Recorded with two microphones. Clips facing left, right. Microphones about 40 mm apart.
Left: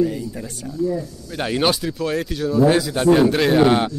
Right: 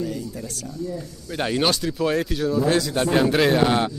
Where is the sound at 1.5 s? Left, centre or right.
Centre.